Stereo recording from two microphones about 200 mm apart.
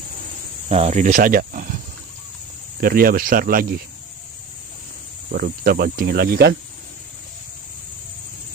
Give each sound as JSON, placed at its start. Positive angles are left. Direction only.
{"t": 0.7, "sound": "speech", "side_deg": -35}
{"t": 2.8, "sound": "cricket", "side_deg": -45}
{"t": 5.3, "sound": "cricket", "side_deg": -45}